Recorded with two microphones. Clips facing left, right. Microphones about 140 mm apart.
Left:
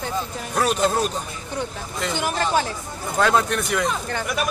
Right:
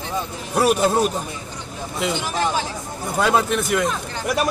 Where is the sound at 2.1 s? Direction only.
50° left (ahead or behind).